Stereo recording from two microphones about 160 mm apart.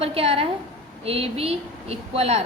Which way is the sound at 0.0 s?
35° right (ahead or behind).